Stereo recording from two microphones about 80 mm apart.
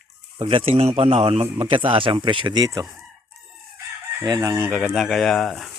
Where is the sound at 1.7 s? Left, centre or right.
Right.